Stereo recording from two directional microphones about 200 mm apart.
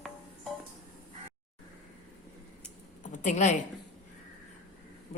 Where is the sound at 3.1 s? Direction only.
40° left (ahead or behind).